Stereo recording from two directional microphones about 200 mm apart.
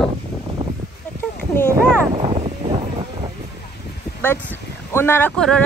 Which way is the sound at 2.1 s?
30° right (ahead or behind).